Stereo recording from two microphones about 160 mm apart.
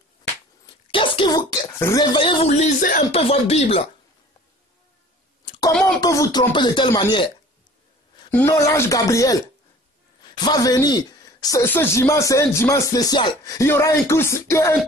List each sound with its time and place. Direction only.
0.9 s a sound: 30° left (ahead or behind)
1.8 s speech: 15° left (ahead or behind)
2.1 s speech: 35° left (ahead or behind)
2.6 s speech: 60° left (ahead or behind)
3.1 s speech: 40° left (ahead or behind)
5.4 s a sound: 35° left (ahead or behind)
5.9 s speech: 20° left (ahead or behind)
8.3 s speech: 15° left (ahead or behind)